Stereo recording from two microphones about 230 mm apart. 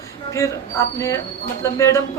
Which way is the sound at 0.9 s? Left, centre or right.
Centre.